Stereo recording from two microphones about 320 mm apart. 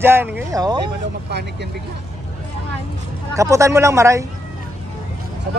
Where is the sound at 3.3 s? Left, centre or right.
Centre.